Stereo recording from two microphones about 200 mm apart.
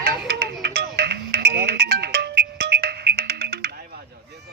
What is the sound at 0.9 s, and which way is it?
Music, 50° right (ahead or behind).